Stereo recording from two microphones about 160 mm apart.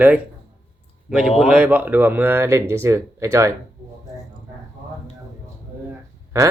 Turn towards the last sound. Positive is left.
turn(degrees=-20)  # may be behind; listen again after turning